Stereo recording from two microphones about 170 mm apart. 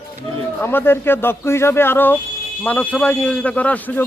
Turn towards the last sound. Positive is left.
turn(degrees=10)  # may be behind; listen again after turning